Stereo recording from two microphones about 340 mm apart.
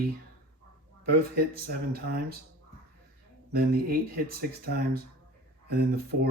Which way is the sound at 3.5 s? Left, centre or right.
Right.